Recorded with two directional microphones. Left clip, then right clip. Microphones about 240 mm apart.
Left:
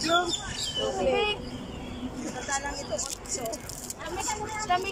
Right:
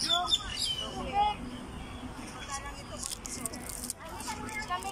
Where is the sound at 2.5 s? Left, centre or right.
Left.